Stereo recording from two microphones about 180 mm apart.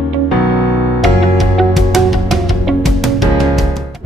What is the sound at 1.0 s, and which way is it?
Music, centre (ahead or behind).